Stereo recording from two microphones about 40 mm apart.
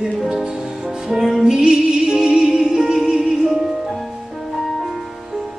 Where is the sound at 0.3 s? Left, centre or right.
Centre.